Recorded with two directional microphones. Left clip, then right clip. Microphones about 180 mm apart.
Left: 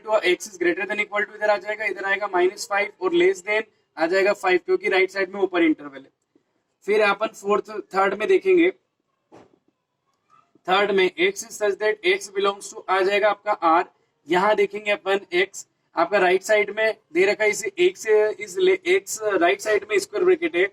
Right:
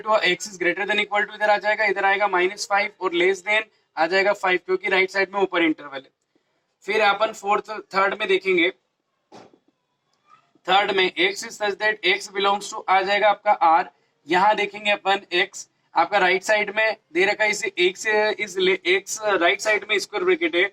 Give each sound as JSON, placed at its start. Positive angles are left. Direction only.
{"t": 0.0, "sound": "a man's voice", "side_deg": -25}
{"t": 10.7, "sound": "a man's voice", "side_deg": -25}